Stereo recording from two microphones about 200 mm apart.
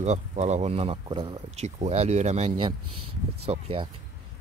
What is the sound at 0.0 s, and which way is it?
Speech, 35° right (ahead or behind).